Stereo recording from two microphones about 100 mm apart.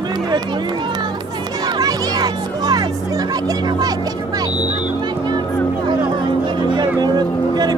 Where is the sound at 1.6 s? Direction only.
40° right (ahead or behind).